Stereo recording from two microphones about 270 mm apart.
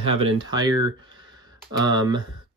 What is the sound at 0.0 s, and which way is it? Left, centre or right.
Speech, right.